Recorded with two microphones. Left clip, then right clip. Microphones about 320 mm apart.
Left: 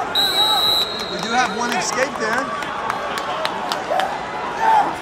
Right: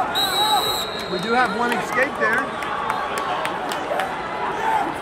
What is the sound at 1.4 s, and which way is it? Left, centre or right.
Speech, centre.